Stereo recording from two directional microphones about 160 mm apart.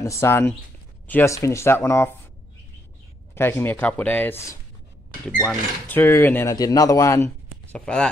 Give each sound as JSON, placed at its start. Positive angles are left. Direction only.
{"t": 0.0, "sound": "speech", "side_deg": 15}
{"t": 3.3, "sound": "a man's voice", "side_deg": 15}
{"t": 7.7, "sound": "speech", "side_deg": 5}